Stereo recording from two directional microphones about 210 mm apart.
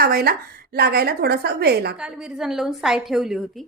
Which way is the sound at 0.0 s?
45° right (ahead or behind).